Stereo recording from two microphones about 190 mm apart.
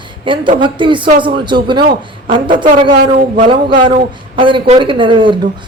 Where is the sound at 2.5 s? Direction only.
45° right (ahead or behind).